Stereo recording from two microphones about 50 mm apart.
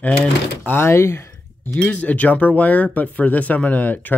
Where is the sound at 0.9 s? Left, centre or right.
Left.